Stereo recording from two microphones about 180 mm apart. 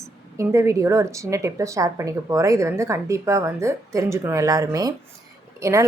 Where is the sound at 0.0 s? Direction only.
15° right (ahead or behind).